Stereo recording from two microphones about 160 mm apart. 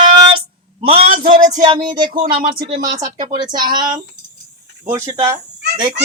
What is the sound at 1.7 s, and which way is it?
Speech, 30° right (ahead or behind).